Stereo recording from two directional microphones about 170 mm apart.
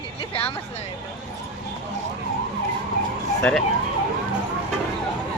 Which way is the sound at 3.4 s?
5° left (ahead or behind).